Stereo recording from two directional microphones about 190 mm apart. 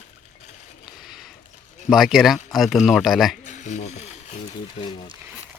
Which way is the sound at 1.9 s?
Centre (ahead or behind).